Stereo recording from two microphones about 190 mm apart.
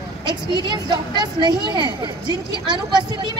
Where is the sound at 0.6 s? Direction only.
25° right (ahead or behind).